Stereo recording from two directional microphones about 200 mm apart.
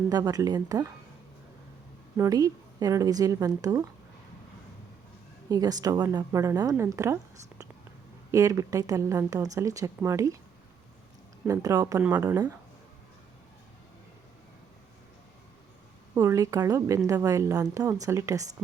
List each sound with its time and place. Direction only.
0.1 s speech: 20° right (ahead or behind)
2.1 s a woman's voice: 15° right (ahead or behind)
5.5 s a woman's voice: 20° right (ahead or behind)
8.3 s a woman's voice: 15° right (ahead or behind)
11.4 s a woman's voice: 15° right (ahead or behind)
16.1 s a woman's voice: 15° right (ahead or behind)